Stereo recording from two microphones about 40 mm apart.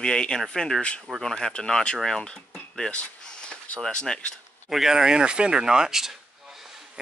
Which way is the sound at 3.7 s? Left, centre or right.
Centre.